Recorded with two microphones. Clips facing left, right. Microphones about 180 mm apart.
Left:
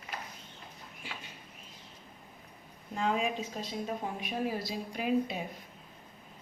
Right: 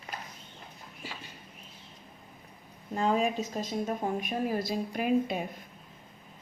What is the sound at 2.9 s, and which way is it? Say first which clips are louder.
A woman's voice: right 4 dB; 40° right (ahead or behind).